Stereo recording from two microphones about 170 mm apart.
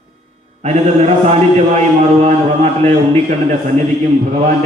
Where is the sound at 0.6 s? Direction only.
40° right (ahead or behind).